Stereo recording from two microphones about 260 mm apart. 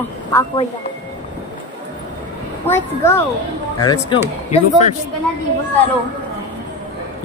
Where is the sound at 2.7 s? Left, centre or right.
Centre.